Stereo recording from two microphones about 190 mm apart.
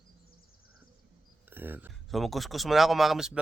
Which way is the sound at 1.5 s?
10° right (ahead or behind).